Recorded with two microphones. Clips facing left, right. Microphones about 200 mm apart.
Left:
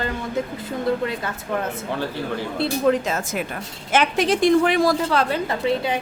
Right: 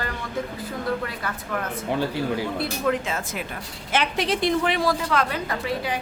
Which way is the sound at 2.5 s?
25° left (ahead or behind).